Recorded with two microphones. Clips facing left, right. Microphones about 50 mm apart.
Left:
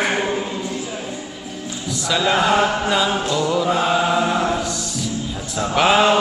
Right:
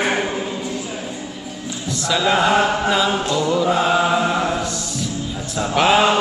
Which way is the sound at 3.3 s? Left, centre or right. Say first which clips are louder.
Right 1 dB; centre.